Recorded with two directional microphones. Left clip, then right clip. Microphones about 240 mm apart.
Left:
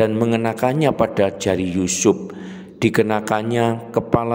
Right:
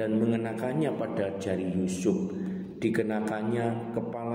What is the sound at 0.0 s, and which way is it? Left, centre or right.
A man's voice, left.